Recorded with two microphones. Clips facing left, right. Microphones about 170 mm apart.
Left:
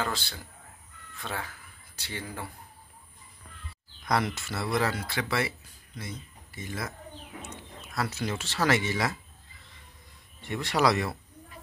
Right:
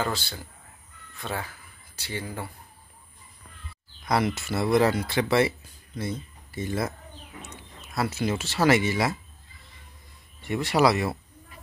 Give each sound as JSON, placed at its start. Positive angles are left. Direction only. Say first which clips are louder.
{"t": 0.0, "sound": "speech", "louder": "right 3 dB", "side_deg": 0}
{"t": 4.0, "sound": "speech", "louder": "right 3 dB", "side_deg": -5}
{"t": 7.9, "sound": "speech", "louder": "right 5 dB", "side_deg": -10}
{"t": 10.4, "sound": "speech", "louder": "right 4 dB", "side_deg": -10}